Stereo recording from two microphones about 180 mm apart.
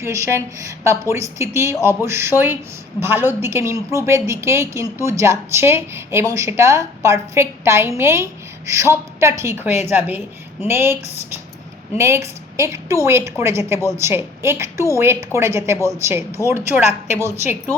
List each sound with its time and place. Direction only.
0.0 s a woman's voice: 15° right (ahead or behind)
11.9 s a woman's voice: 15° right (ahead or behind)